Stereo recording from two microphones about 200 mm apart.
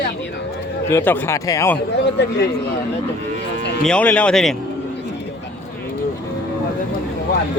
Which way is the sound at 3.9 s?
5° left (ahead or behind).